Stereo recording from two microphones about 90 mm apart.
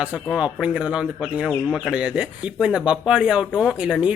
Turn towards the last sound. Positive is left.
turn(degrees=-10)  # may be behind; listen again after turning